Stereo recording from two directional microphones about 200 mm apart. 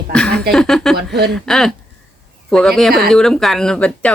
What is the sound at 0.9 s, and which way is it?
Speech, 55° right (ahead or behind).